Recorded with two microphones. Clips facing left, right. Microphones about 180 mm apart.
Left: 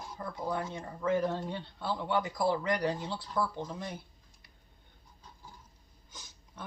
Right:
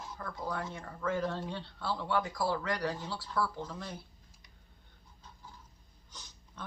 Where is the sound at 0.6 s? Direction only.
15° left (ahead or behind).